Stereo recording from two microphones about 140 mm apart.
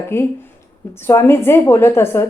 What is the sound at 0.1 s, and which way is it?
A woman's voice, 15° left (ahead or behind).